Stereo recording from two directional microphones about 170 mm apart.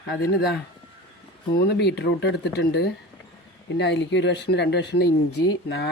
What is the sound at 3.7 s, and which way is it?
Speech, 90° left.